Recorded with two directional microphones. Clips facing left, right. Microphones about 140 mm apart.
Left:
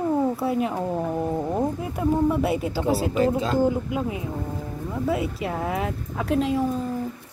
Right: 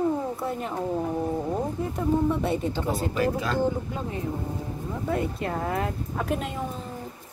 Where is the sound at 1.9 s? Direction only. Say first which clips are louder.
Left 2 dB; 5° left (ahead or behind).